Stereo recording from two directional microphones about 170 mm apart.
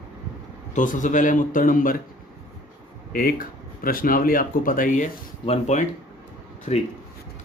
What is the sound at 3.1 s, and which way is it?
A man's voice, 55° left (ahead or behind).